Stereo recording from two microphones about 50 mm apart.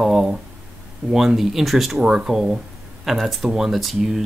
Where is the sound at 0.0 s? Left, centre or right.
Centre.